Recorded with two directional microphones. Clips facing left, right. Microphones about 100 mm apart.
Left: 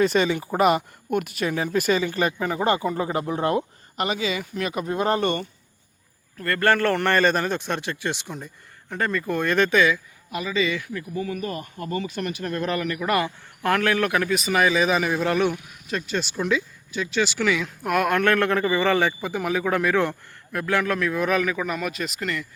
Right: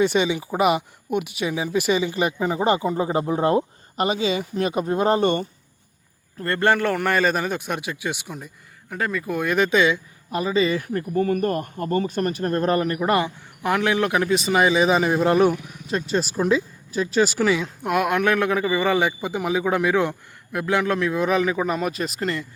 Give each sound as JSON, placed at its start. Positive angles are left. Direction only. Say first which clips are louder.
{"t": 0.0, "sound": "speech", "louder": "even", "side_deg": -5}
{"t": 6.7, "sound": "speech", "louder": "even", "side_deg": -15}
{"t": 10.3, "sound": "speech", "louder": "right 4 dB", "side_deg": -35}
{"t": 17.9, "sound": "speech", "louder": "even", "side_deg": -15}